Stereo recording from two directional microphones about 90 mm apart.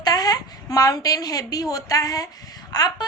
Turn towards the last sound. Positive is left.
turn(degrees=45)  # may be behind; listen again after turning